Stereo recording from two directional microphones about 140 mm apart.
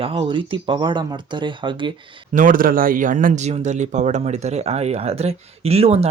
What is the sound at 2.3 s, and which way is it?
Speech, 75° right (ahead or behind).